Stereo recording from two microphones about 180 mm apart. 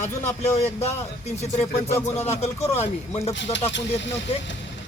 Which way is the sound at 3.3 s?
85° left.